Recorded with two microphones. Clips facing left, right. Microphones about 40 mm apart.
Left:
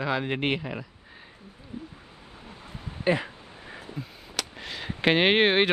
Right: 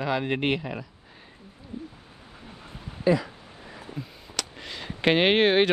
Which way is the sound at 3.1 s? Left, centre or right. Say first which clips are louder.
Right 2 dB; left.